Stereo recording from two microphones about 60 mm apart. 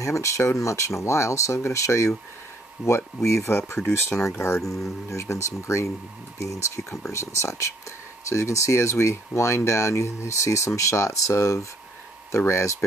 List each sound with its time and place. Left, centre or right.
0.0 s speech: left
3.4 s speech: left
4.6 s speech: centre
4.8 s speech: left